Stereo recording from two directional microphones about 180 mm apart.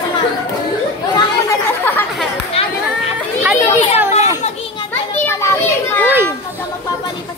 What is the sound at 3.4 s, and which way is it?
Speech, 10° right (ahead or behind).